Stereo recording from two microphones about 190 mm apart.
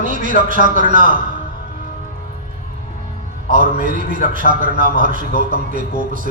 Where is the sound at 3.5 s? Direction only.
45° right (ahead or behind).